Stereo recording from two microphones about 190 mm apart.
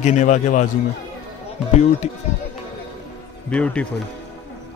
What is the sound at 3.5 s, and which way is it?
Speech, 5° left (ahead or behind).